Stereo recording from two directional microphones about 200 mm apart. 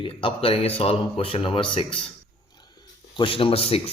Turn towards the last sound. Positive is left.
turn(degrees=30)  # may be behind; listen again after turning